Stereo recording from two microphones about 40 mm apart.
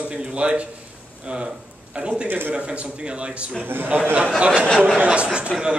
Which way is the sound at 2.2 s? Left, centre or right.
Right.